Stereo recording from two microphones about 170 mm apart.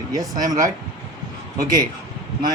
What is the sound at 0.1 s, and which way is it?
Speech, 25° right (ahead or behind).